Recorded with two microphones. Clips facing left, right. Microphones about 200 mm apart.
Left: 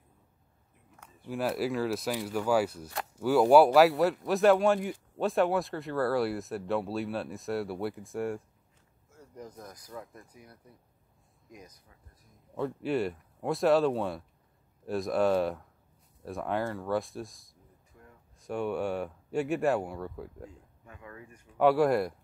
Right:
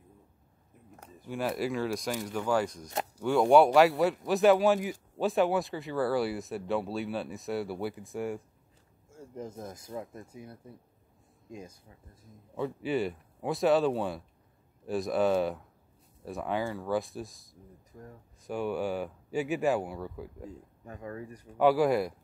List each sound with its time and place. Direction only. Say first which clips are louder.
1.2 s speech: left 1 dB; centre (ahead or behind)
9.1 s speech: right 5 dB; 25° right (ahead or behind)
12.5 s speech: even; centre (ahead or behind)
17.9 s speech: right 8 dB; 40° right (ahead or behind)
18.4 s speech: even; centre (ahead or behind)
20.8 s speech: right 8 dB; 35° right (ahead or behind)
21.5 s speech: even; centre (ahead or behind)